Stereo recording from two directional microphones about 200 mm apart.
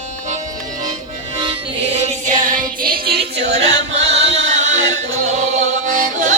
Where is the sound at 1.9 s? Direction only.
35° right (ahead or behind).